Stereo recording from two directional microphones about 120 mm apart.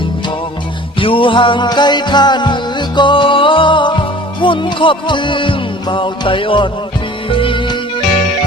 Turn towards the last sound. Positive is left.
turn(degrees=45)  # may be behind; listen again after turning